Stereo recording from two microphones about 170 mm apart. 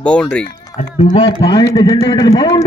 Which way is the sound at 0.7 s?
20° left (ahead or behind).